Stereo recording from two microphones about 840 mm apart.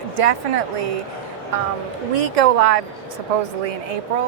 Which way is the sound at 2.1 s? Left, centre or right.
Right.